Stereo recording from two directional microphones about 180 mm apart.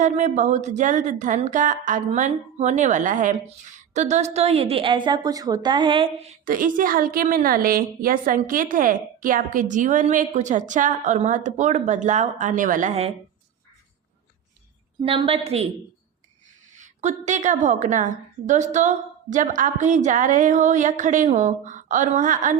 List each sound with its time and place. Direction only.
0.0 s a woman's voice: 40° right (ahead or behind)
6.4 s a woman's voice: 50° right (ahead or behind)
15.0 s a woman's voice: 30° right (ahead or behind)
16.7 s a woman's voice: 40° right (ahead or behind)